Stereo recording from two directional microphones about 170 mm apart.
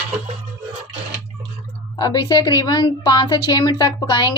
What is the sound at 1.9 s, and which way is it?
A woman's voice, 25° left (ahead or behind).